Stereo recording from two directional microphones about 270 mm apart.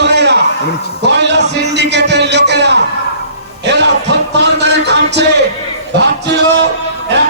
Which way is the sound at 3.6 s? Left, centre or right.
Right.